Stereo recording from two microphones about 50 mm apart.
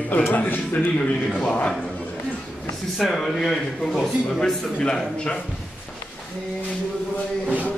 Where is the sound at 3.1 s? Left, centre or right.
Centre.